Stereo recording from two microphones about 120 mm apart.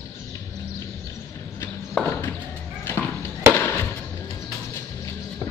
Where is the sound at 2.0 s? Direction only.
20° left (ahead or behind).